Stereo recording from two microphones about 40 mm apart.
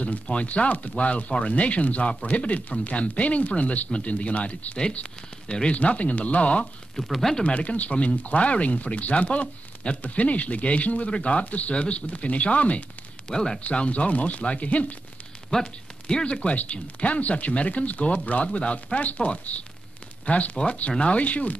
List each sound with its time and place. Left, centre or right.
0.0 s speech: left
7.0 s speech: centre
7.4 s speech: left
13.3 s speech: centre
13.6 s speech: left
15.6 s speech: left
16.3 s speech: left